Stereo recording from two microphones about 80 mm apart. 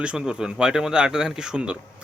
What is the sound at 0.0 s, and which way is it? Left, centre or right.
Speech, centre.